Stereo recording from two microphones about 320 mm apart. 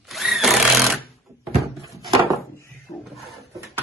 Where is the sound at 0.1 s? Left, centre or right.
Centre.